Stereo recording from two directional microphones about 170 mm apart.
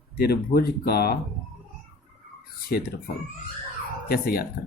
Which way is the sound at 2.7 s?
65° left (ahead or behind).